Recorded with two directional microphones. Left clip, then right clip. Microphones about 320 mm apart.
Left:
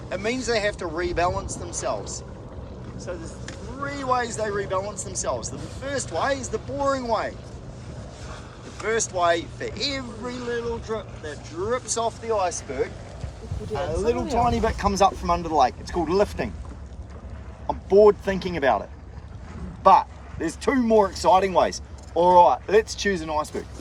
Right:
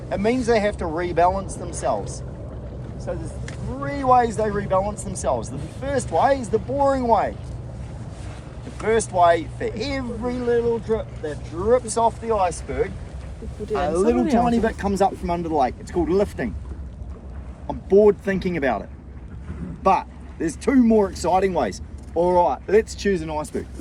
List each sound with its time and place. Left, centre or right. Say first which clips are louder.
0.1 s speech: right 5 dB; centre
8.8 s speech: right 5 dB; centre
14.4 s speech: right 1 dB; centre
18.0 s speech: even; centre
19.8 s speech: left 3 dB; centre